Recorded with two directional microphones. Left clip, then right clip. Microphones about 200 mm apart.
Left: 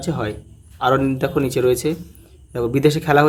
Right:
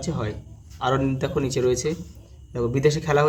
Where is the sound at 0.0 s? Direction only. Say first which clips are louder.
Left 5 dB; 25° left (ahead or behind).